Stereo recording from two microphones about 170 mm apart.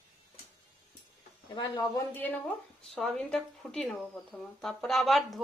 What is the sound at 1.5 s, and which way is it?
Speech, 25° left (ahead or behind).